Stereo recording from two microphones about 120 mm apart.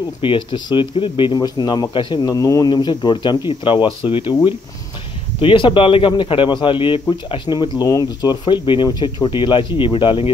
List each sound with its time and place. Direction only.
0.2 s speech: 45° left (ahead or behind); by 2.7 s 30° left (ahead or behind)
2.7 s speech: 40° left (ahead or behind)
5.4 s a man's voice: 45° left (ahead or behind)